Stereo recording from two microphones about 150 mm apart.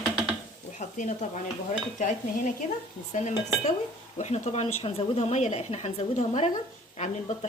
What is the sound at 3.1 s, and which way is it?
Speech, 50° left (ahead or behind).